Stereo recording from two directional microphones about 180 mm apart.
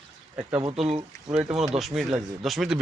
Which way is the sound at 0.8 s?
35° right (ahead or behind).